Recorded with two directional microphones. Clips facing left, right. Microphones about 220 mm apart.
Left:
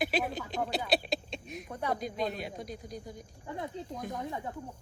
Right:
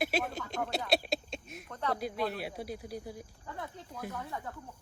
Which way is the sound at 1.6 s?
10° left (ahead or behind).